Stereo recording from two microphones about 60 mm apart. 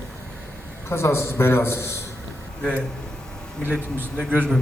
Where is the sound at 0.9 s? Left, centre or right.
Left.